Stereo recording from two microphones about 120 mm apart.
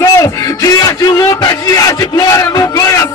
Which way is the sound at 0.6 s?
30° left (ahead or behind).